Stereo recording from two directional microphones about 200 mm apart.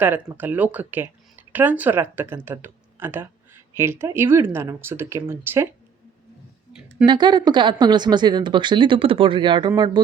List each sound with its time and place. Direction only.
0.0 s speech: 10° right (ahead or behind)
7.0 s speech: 20° right (ahead or behind)